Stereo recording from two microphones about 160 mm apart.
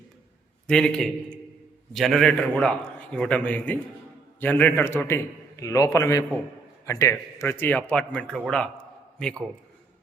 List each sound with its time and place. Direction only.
0.7 s a man's voice: 5° left (ahead or behind)